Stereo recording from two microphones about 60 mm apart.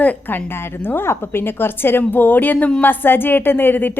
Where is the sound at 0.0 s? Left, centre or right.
Left.